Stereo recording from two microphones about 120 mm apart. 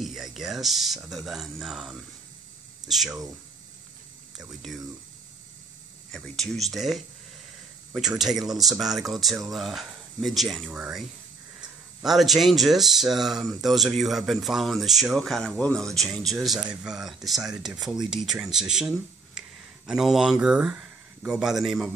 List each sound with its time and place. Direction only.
0.0 s speech: 5° right (ahead or behind)
6.1 s speech: 5° left (ahead or behind)